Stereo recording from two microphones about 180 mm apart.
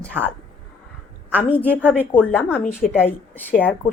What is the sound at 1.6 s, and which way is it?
Speech, 10° right (ahead or behind).